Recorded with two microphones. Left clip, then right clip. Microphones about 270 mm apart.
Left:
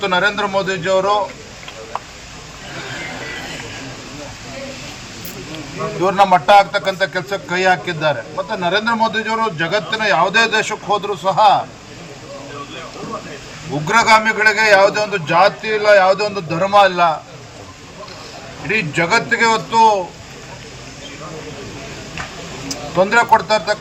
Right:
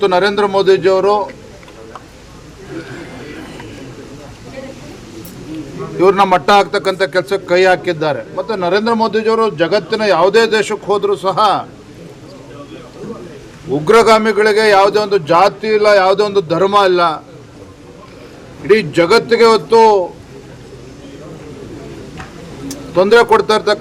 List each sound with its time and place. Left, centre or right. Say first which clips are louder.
0.2 s a man's voice: right 4 dB; centre
6.0 s a man's voice: right 3 dB; centre
13.8 s a man's voice: right 3 dB; centre
18.7 s a man's voice: right 6 dB; centre
23.0 s a man's voice: right 4 dB; centre